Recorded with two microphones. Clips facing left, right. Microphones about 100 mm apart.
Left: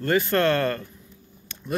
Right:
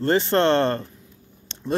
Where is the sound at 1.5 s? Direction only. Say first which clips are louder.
Right 1 dB; 25° right (ahead or behind).